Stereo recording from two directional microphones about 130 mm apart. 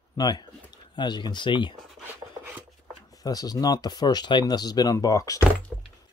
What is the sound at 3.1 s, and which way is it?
Speech, 30° left (ahead or behind).